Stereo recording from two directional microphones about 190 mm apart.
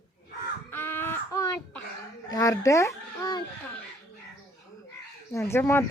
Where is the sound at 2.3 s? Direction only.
15° left (ahead or behind).